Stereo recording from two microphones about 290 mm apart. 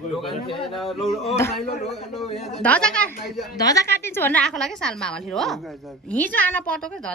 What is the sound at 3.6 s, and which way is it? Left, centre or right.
A woman's voice, centre.